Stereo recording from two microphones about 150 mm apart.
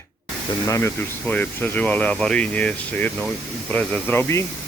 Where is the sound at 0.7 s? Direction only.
15° left (ahead or behind).